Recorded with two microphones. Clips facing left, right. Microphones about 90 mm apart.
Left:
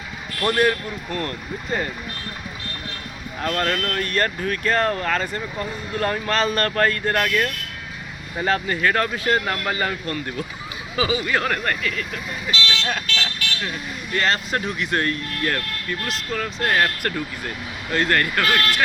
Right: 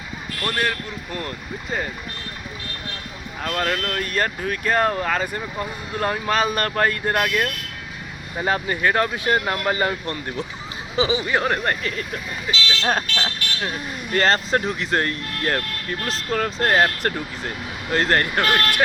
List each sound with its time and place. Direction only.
0.4 s speech: 15° left (ahead or behind)
3.4 s speech: 5° right (ahead or behind); by 12.0 s 30° right (ahead or behind)
12.8 s speech: 40° right (ahead or behind)
16.7 s speech: 25° right (ahead or behind)